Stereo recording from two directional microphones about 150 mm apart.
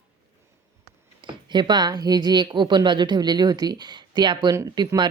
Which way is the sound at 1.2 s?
30° right (ahead or behind).